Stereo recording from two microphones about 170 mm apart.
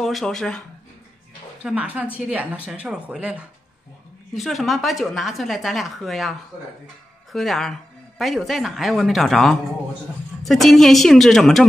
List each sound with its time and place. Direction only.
0.0 s a woman's voice: centre (ahead or behind)
7.3 s a woman's voice: centre (ahead or behind)